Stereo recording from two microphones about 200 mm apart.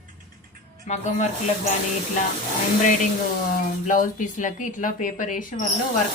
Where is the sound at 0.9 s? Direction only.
35° left (ahead or behind).